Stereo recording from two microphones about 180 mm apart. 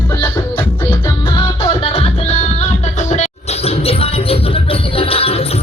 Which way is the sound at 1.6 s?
35° left (ahead or behind).